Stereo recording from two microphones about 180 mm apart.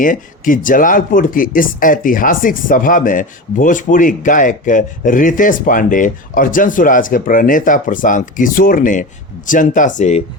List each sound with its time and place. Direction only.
0.0 s speech: 50° left (ahead or behind)